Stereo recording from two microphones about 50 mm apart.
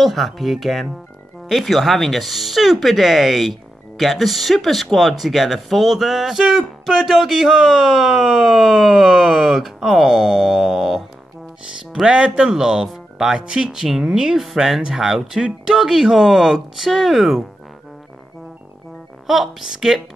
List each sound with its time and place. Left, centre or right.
0.0 s speech: centre
19.2 s speech: centre